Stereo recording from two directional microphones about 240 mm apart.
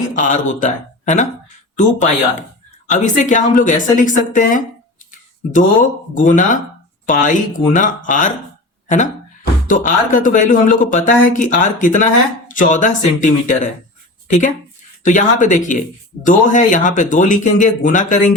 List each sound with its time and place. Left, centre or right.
0.2 s speech: left
6.1 s speech: left